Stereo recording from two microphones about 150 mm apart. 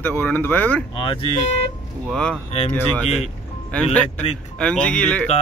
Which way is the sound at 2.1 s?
5° left (ahead or behind).